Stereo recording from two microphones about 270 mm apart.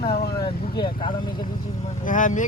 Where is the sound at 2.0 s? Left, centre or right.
Left.